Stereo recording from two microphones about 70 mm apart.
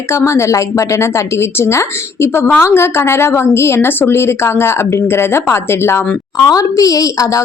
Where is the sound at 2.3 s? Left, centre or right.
Left.